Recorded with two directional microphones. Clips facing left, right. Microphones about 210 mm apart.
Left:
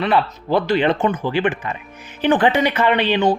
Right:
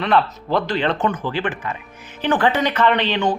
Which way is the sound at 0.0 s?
5° left (ahead or behind).